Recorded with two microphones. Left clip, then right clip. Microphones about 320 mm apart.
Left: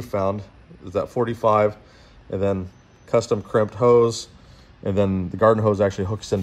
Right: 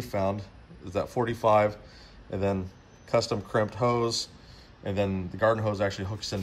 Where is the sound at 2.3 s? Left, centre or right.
Left.